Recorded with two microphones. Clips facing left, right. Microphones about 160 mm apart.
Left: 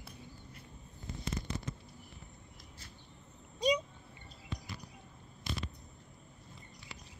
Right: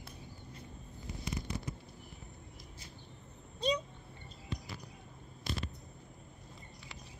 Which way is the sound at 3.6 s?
10° left (ahead or behind).